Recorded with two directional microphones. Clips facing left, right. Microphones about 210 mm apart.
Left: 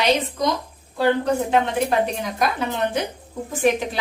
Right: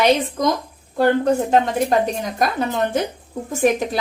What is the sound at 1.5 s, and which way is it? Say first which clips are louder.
A woman's voice: right 3 dB; 40° right (ahead or behind).